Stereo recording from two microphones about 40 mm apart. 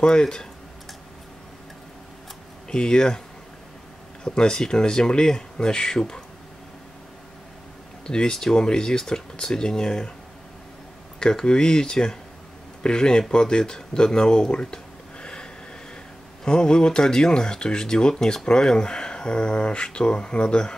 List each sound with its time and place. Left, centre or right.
0.0 s speech: centre
2.7 s speech: centre
4.2 s speech: centre
8.1 s speech: centre
11.1 s speech: left
16.4 s speech: centre